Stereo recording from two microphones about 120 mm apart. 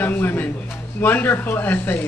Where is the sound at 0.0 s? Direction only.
15° left (ahead or behind).